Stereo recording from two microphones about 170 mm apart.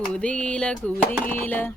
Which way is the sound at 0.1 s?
5° left (ahead or behind).